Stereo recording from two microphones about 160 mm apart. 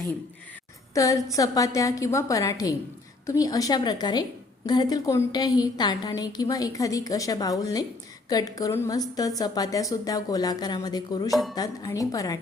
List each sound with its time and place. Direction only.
0.9 s a woman's voice: 20° left (ahead or behind)